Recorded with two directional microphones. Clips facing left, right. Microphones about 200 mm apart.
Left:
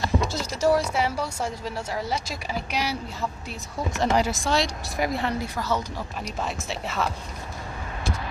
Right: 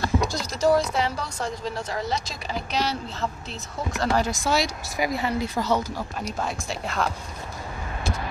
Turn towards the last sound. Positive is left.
turn(degrees=5)  # may be behind; listen again after turning